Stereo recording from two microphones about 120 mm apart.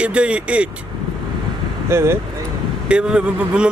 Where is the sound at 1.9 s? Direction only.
20° right (ahead or behind).